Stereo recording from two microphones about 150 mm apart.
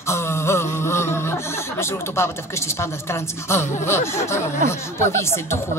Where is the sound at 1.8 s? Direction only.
15° left (ahead or behind).